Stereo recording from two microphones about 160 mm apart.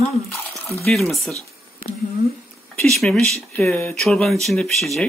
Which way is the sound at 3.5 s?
15° left (ahead or behind).